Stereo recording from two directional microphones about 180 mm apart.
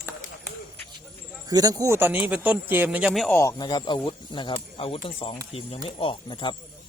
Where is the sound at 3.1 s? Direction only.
5° left (ahead or behind); by 6.6 s 25° left (ahead or behind).